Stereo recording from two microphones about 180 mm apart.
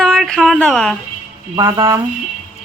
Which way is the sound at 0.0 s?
5° left (ahead or behind).